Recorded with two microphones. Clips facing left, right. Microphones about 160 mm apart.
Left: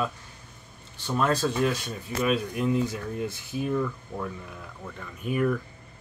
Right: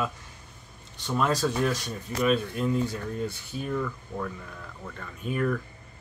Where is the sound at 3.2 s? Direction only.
90° left.